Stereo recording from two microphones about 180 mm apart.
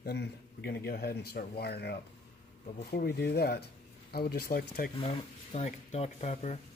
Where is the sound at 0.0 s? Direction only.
65° left (ahead or behind).